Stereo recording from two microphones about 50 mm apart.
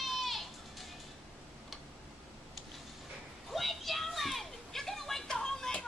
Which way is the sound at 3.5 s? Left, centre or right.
Centre.